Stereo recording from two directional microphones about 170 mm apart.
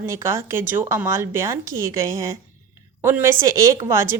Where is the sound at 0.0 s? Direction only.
15° right (ahead or behind).